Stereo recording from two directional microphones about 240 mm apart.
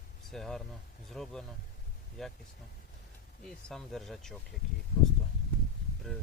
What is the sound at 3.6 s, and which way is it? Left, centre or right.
Speech, centre.